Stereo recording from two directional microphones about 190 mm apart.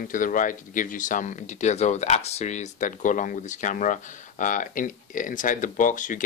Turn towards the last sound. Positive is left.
turn(degrees=45)  # may be behind; listen again after turning